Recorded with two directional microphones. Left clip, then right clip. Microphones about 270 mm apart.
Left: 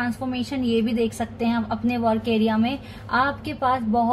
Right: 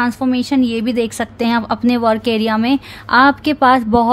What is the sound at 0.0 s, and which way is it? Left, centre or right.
Speech, right.